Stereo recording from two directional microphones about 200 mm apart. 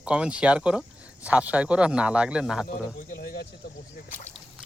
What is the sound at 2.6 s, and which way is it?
Speech, 45° left (ahead or behind).